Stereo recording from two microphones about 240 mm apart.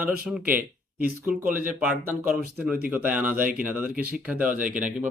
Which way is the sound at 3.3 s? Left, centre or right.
Right.